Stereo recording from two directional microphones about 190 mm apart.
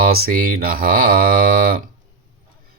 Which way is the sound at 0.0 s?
50° right (ahead or behind).